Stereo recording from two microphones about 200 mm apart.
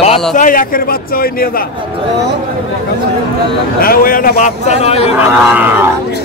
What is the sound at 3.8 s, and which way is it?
A man's voice, 45° left (ahead or behind).